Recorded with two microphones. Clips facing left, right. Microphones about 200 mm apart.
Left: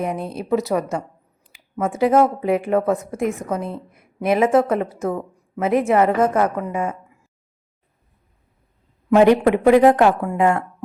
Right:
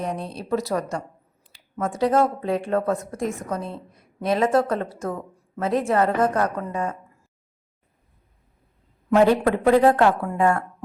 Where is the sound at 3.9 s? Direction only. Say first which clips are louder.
Left 4 dB; 25° left (ahead or behind).